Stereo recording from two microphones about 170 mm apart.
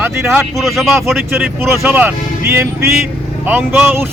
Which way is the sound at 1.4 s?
10° right (ahead or behind).